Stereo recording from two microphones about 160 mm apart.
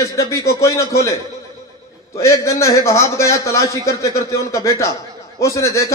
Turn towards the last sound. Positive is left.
turn(degrees=20)  # may be behind; listen again after turning